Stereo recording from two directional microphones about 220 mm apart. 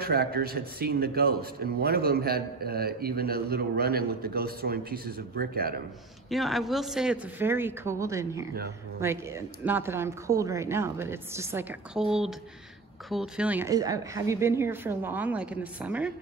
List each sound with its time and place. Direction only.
0.0 s a man's voice: 45° right (ahead or behind)
6.3 s speech: centre (ahead or behind)